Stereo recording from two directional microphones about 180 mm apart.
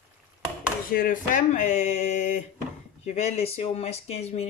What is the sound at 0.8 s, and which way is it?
Speech, 50° left (ahead or behind).